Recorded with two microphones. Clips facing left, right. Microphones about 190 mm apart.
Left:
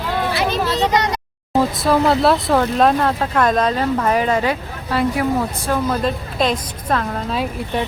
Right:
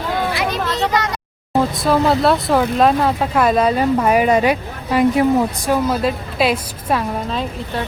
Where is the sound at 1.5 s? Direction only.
Centre (ahead or behind).